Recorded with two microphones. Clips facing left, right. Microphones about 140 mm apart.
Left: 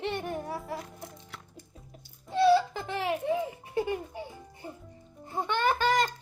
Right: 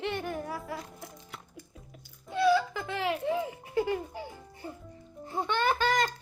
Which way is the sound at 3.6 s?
25° left (ahead or behind).